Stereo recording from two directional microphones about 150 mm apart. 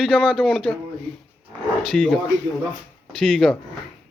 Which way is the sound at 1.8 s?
5° left (ahead or behind).